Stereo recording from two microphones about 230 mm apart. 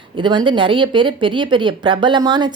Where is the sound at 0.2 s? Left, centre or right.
Right.